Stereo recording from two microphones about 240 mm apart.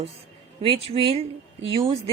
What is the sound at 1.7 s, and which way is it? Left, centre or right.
Speech, right.